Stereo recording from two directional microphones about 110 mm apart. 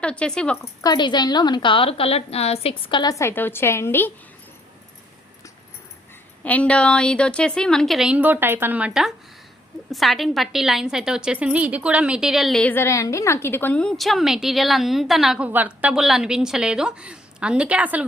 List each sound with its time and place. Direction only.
0.0 s a woman's voice: 10° left (ahead or behind)
0.6 s a woman's voice: 35° left (ahead or behind); by 2.9 s 65° left (ahead or behind)
2.9 s a woman's voice: 40° left (ahead or behind)
3.2 s a woman's voice: 20° left (ahead or behind)
6.4 s a woman's voice: 10° left (ahead or behind); by 8.9 s 15° right (ahead or behind)
8.9 s a woman's voice: 5° right (ahead or behind)
12.6 s a woman's voice: 20° left (ahead or behind); by 15.4 s 5° right (ahead or behind)
15.4 s a woman's voice: 15° right (ahead or behind)